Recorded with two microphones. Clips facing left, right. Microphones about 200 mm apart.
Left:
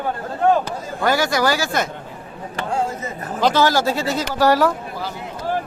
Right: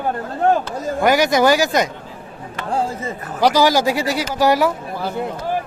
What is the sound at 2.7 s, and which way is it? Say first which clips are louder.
Speech: right 2 dB; 35° right (ahead or behind).